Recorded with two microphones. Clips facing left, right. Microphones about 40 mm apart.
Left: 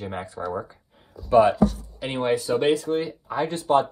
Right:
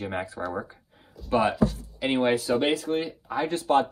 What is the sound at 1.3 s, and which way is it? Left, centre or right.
Speech, centre.